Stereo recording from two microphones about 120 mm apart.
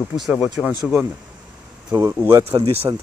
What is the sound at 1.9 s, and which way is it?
Speech, 35° right (ahead or behind).